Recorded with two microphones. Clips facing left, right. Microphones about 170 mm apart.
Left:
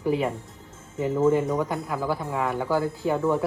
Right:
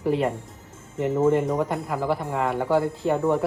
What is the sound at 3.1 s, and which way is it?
Speech, 30° right (ahead or behind).